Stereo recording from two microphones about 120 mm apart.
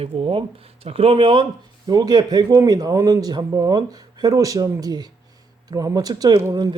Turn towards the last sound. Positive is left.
turn(degrees=-30)  # may be behind; listen again after turning